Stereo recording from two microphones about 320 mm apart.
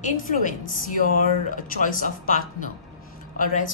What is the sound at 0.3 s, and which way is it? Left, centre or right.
A woman's voice, left.